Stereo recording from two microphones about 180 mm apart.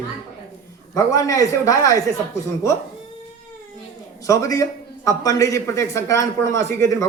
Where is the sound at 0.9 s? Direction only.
20° left (ahead or behind).